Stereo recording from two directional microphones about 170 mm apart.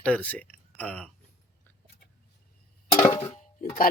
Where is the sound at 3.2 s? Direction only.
40° left (ahead or behind).